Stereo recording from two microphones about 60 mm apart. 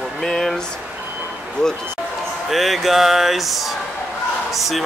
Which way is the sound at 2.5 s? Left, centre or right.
Centre.